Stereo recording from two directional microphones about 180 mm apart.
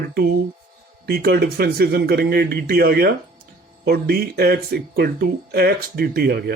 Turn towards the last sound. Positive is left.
turn(degrees=-60)  # may be behind; listen again after turning